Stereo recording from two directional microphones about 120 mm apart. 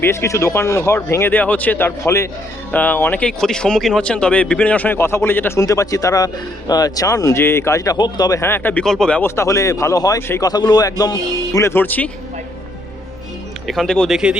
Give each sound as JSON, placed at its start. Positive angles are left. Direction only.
{"t": 0.0, "sound": "speech", "side_deg": 20}
{"t": 7.9, "sound": "speech", "side_deg": 35}
{"t": 8.4, "sound": "speech", "side_deg": 20}
{"t": 8.8, "sound": "speech", "side_deg": 5}
{"t": 9.2, "sound": "speech", "side_deg": 25}
{"t": 13.7, "sound": "speech", "side_deg": 5}